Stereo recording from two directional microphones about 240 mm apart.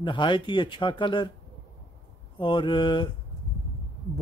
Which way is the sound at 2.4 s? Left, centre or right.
Centre.